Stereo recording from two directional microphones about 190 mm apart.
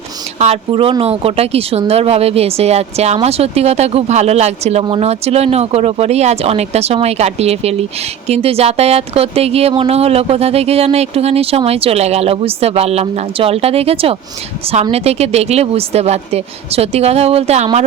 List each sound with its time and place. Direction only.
0.3 s a woman's voice: 35° right (ahead or behind)